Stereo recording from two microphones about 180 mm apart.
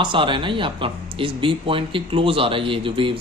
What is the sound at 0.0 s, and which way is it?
Speech, 25° right (ahead or behind).